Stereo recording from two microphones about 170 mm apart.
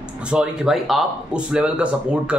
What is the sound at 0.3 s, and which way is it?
A man's voice, 5° right (ahead or behind).